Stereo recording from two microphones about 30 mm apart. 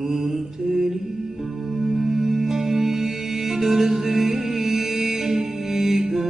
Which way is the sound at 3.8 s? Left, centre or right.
Right.